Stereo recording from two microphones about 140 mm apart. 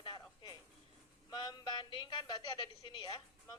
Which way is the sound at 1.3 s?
30° left (ahead or behind).